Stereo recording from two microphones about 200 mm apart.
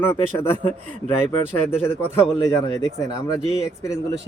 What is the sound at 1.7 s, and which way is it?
Speech, 10° left (ahead or behind).